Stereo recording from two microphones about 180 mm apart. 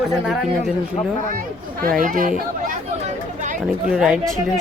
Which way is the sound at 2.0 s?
50° right (ahead or behind).